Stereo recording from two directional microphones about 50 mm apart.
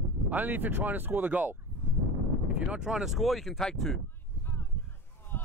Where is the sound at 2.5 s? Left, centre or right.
Right.